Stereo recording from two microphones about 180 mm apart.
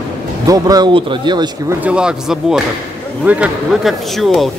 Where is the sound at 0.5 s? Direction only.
20° right (ahead or behind).